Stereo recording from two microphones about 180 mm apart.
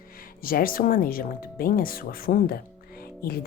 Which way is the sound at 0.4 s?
55° left (ahead or behind).